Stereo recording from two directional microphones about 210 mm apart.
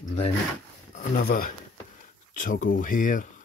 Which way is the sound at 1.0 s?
45° left (ahead or behind).